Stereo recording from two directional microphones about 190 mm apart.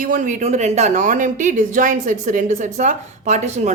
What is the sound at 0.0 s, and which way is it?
Speech, 45° right (ahead or behind).